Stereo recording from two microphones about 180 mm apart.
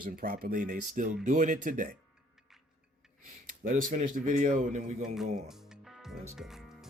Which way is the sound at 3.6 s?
50° right (ahead or behind).